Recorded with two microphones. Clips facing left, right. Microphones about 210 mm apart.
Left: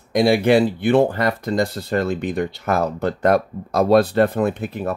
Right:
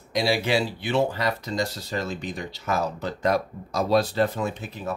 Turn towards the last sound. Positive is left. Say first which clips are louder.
# left 8 dB
turn(degrees=55)  # may be behind; listen again after turning